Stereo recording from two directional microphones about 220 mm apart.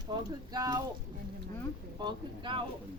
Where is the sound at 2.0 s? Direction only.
20° right (ahead or behind).